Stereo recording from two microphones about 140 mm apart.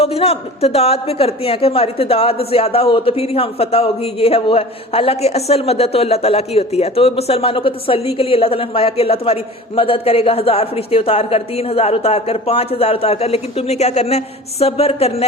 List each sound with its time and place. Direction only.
0.0 s a man's voice: 45° left (ahead or behind)